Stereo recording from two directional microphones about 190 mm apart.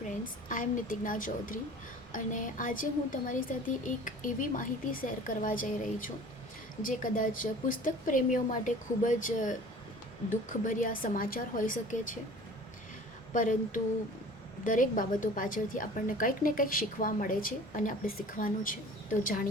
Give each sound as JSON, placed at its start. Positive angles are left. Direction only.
{"t": 0.1, "sound": "a woman's voice", "side_deg": 45}
{"t": 10.7, "sound": "a woman's voice", "side_deg": 45}
{"t": 13.3, "sound": "a woman's voice", "side_deg": 45}